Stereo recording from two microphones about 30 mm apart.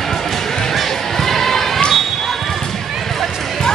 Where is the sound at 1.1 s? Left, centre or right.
Centre.